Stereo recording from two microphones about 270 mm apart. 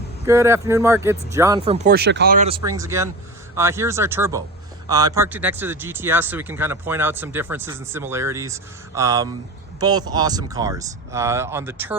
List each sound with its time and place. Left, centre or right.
0.3 s speech: centre
1.9 s speech: right
2.6 s speech: centre